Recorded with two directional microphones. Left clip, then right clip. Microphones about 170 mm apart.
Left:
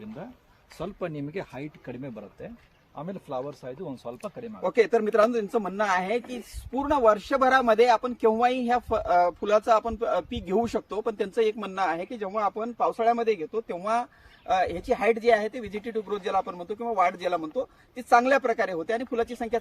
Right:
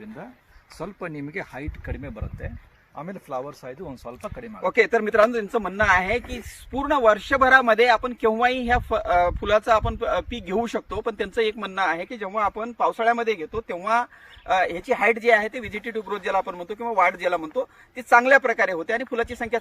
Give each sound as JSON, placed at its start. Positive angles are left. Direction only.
{"t": 0.8, "sound": "speech", "side_deg": 35}
{"t": 1.1, "sound": "speech", "side_deg": 45}
{"t": 1.9, "sound": "speech", "side_deg": 25}
{"t": 4.6, "sound": "speech", "side_deg": -15}